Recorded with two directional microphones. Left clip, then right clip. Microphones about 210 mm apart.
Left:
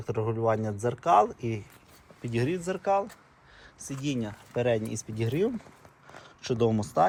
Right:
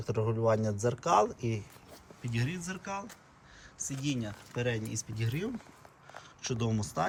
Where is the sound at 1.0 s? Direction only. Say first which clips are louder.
Left 5 dB; 20° right (ahead or behind).